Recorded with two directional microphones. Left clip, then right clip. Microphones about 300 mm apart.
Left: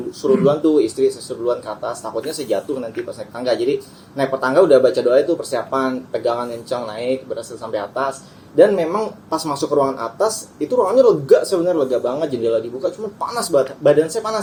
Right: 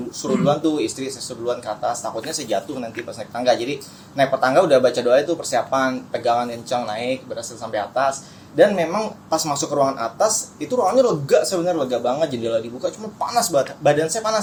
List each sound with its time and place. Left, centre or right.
0.2 s speech: centre